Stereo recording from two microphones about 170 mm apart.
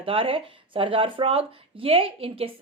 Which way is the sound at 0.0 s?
30° right (ahead or behind).